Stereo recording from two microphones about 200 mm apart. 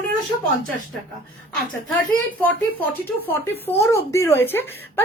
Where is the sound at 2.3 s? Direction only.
10° left (ahead or behind).